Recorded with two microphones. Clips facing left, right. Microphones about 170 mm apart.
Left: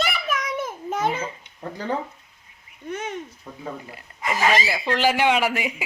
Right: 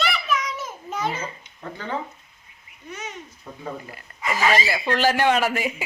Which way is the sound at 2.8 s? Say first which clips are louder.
Left 6 dB; 55° left (ahead or behind).